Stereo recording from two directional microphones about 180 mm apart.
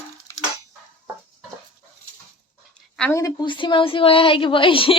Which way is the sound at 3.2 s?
25° left (ahead or behind).